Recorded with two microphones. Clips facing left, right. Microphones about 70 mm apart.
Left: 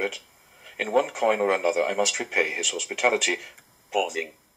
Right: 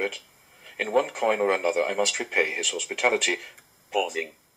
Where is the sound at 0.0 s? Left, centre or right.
Centre.